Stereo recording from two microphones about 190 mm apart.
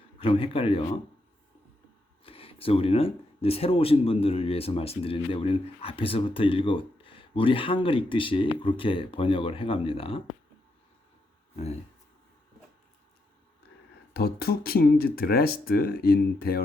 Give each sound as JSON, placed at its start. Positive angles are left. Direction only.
{"t": 0.2, "sound": "speech", "side_deg": 30}
{"t": 2.2, "sound": "speech", "side_deg": 30}
{"t": 11.5, "sound": "speech", "side_deg": 35}
{"t": 14.1, "sound": "speech", "side_deg": 55}